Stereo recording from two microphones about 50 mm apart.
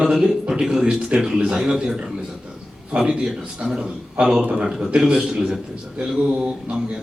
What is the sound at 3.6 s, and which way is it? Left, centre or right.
A man's voice, centre.